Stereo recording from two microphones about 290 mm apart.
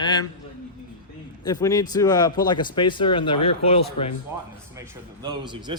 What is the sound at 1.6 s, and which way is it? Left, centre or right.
A man's voice, centre.